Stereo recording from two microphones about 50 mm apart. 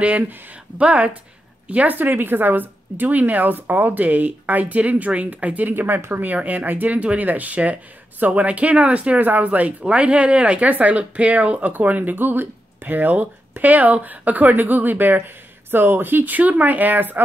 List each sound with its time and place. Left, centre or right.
0.7 s a woman's voice: right
2.0 s speech: right